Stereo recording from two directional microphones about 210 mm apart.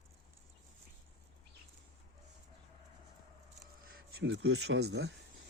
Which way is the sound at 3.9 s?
50° right (ahead or behind).